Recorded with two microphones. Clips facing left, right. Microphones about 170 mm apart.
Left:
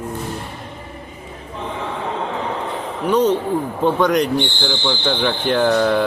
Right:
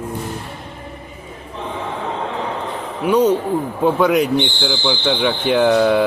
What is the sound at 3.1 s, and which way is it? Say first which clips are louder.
Speech: right 2 dB; 10° right (ahead or behind).